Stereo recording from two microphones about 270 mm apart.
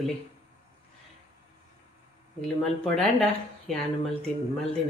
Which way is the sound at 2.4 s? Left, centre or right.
Centre.